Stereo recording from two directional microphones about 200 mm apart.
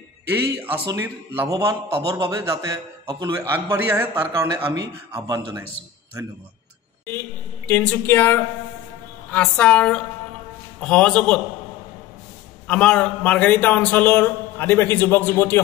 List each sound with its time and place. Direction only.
0.8 s a man's voice: 10° right (ahead or behind)
7.1 s a man's voice: 10° left (ahead or behind)
12.6 s a man's voice: 5° left (ahead or behind)